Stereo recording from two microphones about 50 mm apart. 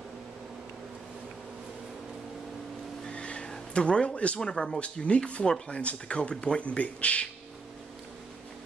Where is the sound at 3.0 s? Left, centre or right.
Left.